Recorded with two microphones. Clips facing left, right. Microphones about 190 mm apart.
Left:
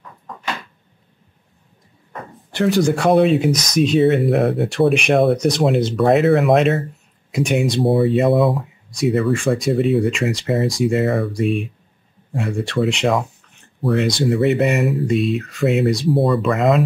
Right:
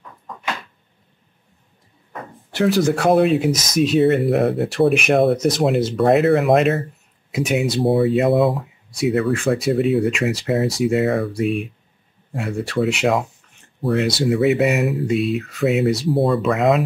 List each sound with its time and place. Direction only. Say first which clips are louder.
2.5 s speech: left 1 dB; centre (ahead or behind)